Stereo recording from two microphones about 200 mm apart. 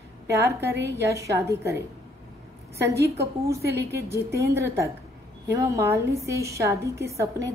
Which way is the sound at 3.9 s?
15° right (ahead or behind).